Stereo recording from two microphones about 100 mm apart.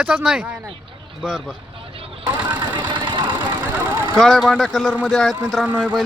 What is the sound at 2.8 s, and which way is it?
Vehicle, 50° right (ahead or behind).